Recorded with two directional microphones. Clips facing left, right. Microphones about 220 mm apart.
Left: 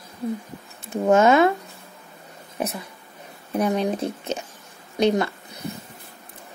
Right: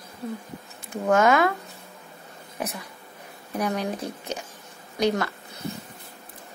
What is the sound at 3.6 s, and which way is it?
Speech, 25° left (ahead or behind).